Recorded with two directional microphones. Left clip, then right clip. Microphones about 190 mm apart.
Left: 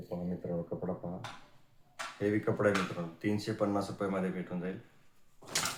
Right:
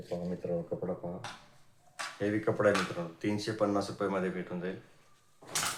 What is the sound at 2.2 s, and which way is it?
Speech, 15° left (ahead or behind).